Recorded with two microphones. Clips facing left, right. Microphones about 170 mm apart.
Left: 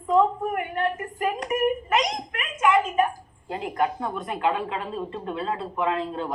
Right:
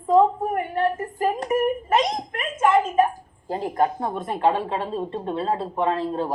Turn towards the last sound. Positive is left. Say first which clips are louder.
# right 3 dB
turn(degrees=-35)  # may be behind; listen again after turning